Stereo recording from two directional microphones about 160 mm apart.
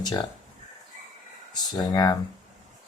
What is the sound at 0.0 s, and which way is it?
Speech, 25° left (ahead or behind).